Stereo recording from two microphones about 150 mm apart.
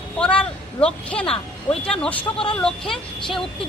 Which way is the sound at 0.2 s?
5° left (ahead or behind).